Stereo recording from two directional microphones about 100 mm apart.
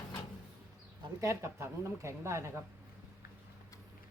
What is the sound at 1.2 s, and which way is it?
A woman's voice, 30° right (ahead or behind).